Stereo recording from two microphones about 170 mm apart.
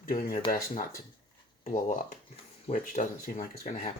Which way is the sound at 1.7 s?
50° left (ahead or behind).